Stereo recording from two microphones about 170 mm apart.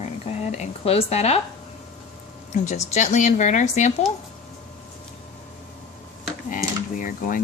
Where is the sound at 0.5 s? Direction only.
35° left (ahead or behind).